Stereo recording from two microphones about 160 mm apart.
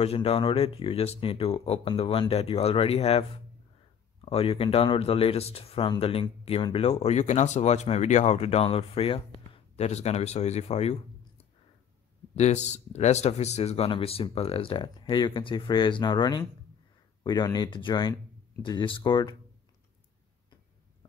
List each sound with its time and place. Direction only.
0.0 s speech: 40° left (ahead or behind)